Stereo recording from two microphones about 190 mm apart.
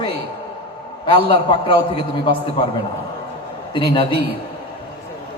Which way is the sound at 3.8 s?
30° left (ahead or behind).